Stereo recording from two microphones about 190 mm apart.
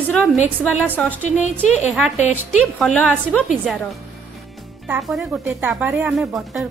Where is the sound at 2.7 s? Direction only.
Centre (ahead or behind).